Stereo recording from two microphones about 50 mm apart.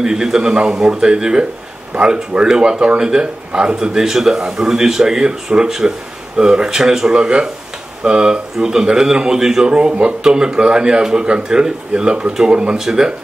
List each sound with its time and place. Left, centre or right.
0.0 s speech: centre